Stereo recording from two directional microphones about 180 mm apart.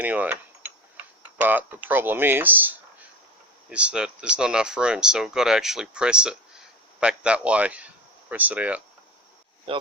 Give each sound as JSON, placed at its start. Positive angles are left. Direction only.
{"t": 0.0, "sound": "mechanisms", "side_deg": -10}
{"t": 1.4, "sound": "speech", "side_deg": -10}
{"t": 9.7, "sound": "speech", "side_deg": -30}